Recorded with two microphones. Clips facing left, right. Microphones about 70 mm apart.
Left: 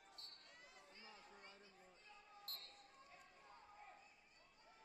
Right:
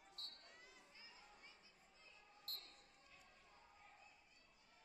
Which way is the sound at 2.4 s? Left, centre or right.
Left.